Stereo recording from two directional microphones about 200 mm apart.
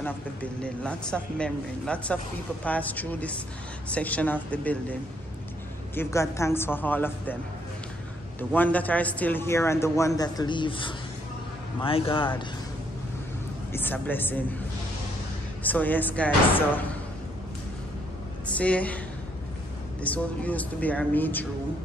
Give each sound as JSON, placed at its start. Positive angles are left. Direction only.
{"t": 0.0, "sound": "a man's voice", "side_deg": 5}
{"t": 5.9, "sound": "a man's voice", "side_deg": 15}
{"t": 8.4, "sound": "a man's voice", "side_deg": 10}
{"t": 13.7, "sound": "a man's voice", "side_deg": 10}
{"t": 15.6, "sound": "a man's voice", "side_deg": 10}
{"t": 18.6, "sound": "a man's voice", "side_deg": 5}
{"t": 20.0, "sound": "a man's voice", "side_deg": 5}